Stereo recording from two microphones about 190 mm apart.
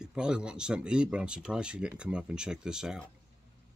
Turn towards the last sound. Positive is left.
turn(degrees=-5)  # may be behind; listen again after turning